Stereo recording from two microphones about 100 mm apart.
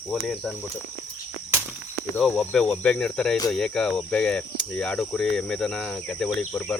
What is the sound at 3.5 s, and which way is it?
Cricket, 5° left (ahead or behind).